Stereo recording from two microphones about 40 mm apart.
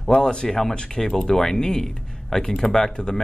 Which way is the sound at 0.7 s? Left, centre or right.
Left.